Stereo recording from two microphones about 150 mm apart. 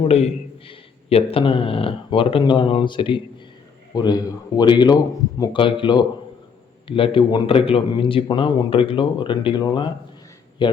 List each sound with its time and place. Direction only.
0.7 s a man's voice: 35° left (ahead or behind)